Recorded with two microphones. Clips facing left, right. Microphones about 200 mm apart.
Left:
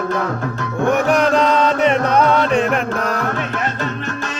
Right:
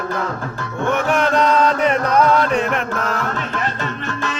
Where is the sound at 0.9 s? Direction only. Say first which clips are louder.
Left 3 dB; 35° left (ahead or behind).